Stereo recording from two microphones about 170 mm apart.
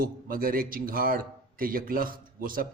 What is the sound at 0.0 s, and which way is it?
Speech, 60° right (ahead or behind).